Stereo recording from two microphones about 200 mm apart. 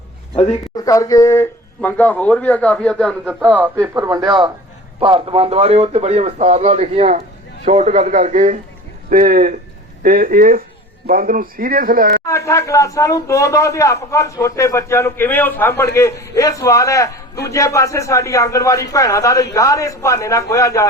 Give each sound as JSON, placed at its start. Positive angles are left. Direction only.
{"t": 0.3, "sound": "speech", "side_deg": 30}
{"t": 0.9, "sound": "speech", "side_deg": 15}
{"t": 3.2, "sound": "a man's voice", "side_deg": -10}
{"t": 12.2, "sound": "speech", "side_deg": 15}